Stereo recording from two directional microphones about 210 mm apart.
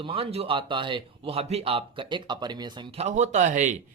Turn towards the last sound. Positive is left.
turn(degrees=-35)  # may be behind; listen again after turning